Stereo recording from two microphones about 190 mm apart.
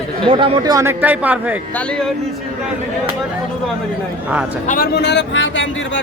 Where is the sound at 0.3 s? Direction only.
25° right (ahead or behind); by 1.5 s 10° right (ahead or behind).